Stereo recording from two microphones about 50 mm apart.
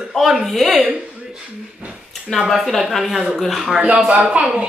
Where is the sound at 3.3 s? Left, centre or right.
Centre.